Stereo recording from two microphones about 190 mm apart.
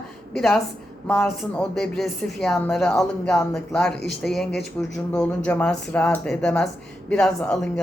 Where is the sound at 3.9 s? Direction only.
65° left (ahead or behind).